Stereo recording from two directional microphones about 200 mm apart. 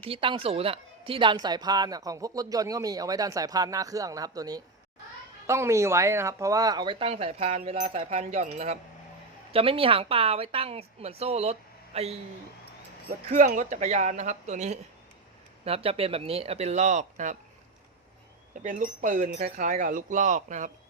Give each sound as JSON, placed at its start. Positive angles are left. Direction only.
{"t": 0.0, "sound": "a woman's voice", "side_deg": -25}
{"t": 13.3, "sound": "a woman's voice", "side_deg": -40}
{"t": 18.5, "sound": "speech", "side_deg": -40}